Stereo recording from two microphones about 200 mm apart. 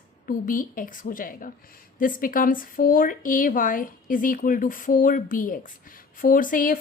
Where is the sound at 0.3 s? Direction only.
45° left (ahead or behind).